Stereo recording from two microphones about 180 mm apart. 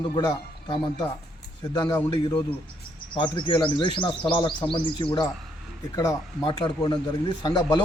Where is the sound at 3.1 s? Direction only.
25° left (ahead or behind).